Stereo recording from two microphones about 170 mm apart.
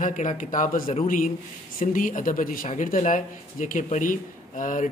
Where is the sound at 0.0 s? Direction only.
45° left (ahead or behind).